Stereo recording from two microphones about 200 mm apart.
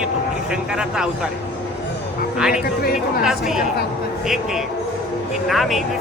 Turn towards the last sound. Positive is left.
turn(degrees=0)  # may be behind; listen again after turning